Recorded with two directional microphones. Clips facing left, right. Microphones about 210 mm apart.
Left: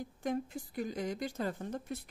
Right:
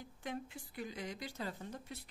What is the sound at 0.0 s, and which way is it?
Speech, 45° left (ahead or behind).